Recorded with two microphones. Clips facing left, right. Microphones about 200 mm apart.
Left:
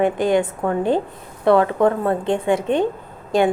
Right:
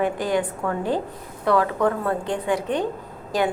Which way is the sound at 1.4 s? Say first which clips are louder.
Left 5 dB; 25° left (ahead or behind).